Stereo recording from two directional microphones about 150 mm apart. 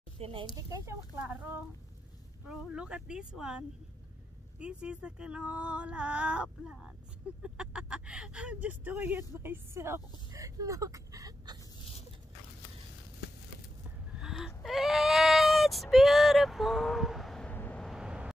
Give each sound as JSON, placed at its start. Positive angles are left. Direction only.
{"t": 0.2, "sound": "speech", "side_deg": -35}
{"t": 0.6, "sound": "speech", "side_deg": -20}
{"t": 14.1, "sound": "a sound", "side_deg": -5}
{"t": 17.8, "sound": "vehicle", "side_deg": -5}